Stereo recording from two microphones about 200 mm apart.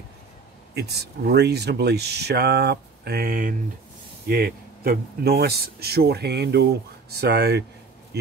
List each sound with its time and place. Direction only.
0.7 s speech: 55° right (ahead or behind)